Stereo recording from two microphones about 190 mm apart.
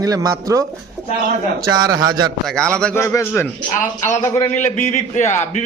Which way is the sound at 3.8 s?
40° left (ahead or behind).